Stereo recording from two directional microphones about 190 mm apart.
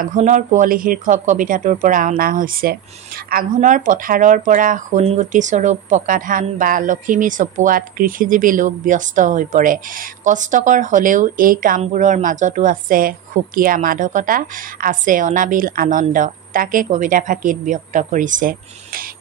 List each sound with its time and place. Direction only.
0.0 s speech: 40° right (ahead or behind)